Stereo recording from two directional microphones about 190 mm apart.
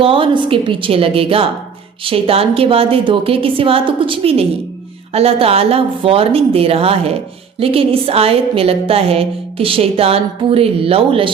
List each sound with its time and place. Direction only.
0.0 s a woman's voice: 30° right (ahead or behind)